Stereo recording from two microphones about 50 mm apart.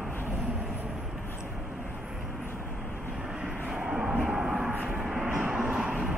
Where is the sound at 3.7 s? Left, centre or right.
Centre.